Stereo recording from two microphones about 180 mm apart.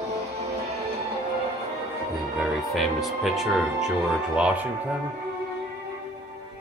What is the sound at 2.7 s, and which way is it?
Speech, centre (ahead or behind).